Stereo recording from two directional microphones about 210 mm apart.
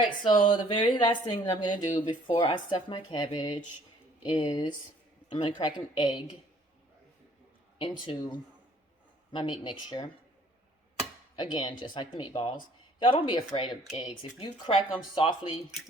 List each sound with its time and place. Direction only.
0.4 s speech: 25° left (ahead or behind)
7.8 s speech: 25° left (ahead or behind)
11.3 s speech: 20° left (ahead or behind)